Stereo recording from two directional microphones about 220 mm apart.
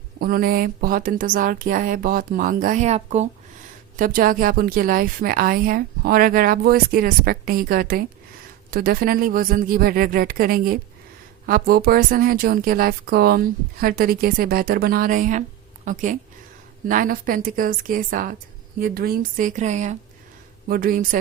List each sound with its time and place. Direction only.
0.2 s speech: 40° right (ahead or behind)